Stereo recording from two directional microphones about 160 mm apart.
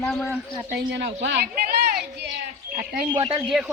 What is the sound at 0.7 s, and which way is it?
Speech, 90° right.